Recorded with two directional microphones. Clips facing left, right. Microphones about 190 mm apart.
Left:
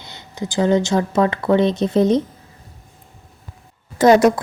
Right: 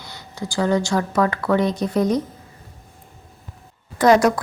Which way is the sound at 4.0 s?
25° left (ahead or behind).